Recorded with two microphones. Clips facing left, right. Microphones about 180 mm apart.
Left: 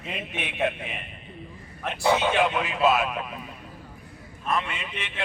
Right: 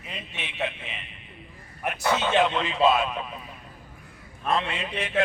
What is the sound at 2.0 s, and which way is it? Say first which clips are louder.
Speech: left 1 dB; 15° left (ahead or behind).